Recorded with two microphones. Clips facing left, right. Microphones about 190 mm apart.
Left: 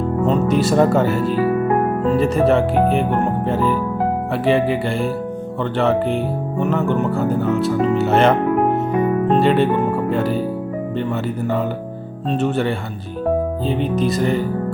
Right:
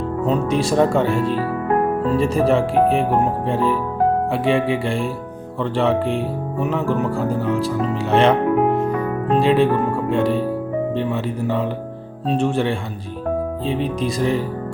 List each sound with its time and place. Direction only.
0.3 s speech: centre (ahead or behind)
7.9 s music: centre (ahead or behind)
9.3 s speech: centre (ahead or behind)